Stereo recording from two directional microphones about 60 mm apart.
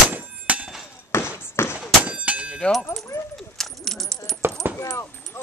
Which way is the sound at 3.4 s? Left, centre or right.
Centre.